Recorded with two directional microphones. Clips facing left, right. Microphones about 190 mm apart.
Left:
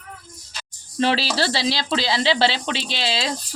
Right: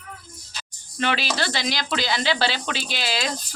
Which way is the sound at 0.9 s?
30° left (ahead or behind).